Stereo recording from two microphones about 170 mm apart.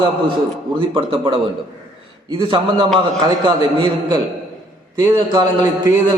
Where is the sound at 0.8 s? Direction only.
30° right (ahead or behind).